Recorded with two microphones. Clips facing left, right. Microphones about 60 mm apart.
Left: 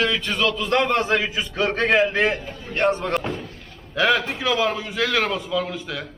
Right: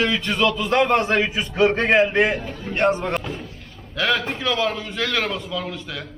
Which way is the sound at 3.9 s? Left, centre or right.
Centre.